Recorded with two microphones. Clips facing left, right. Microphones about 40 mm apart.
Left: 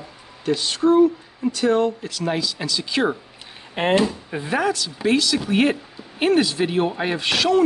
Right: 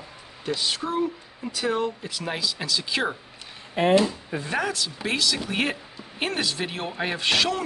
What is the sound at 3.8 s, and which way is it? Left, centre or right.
Speech, left.